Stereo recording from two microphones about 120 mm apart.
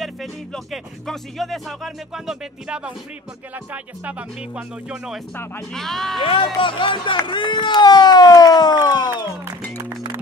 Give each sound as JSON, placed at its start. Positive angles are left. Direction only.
{"t": 0.0, "sound": "speech", "side_deg": 0}
{"t": 3.7, "sound": "music", "side_deg": -10}
{"t": 5.7, "sound": "speech", "side_deg": 5}
{"t": 6.2, "sound": "speech", "side_deg": 45}
{"t": 9.8, "sound": "music", "side_deg": -20}